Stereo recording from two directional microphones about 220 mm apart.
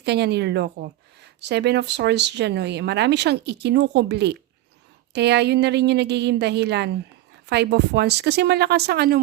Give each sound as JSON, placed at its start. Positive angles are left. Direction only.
{"t": 0.0, "sound": "speech", "side_deg": -50}